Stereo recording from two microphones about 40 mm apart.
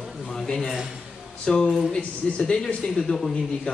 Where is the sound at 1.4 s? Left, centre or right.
Left.